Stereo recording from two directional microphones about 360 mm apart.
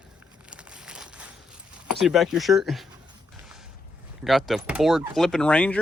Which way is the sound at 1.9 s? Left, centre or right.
Centre.